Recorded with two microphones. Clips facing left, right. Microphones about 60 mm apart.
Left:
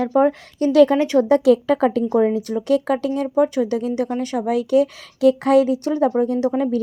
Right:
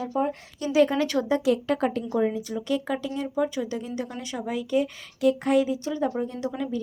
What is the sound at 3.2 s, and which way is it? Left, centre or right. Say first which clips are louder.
Speech: left 9 dB; left.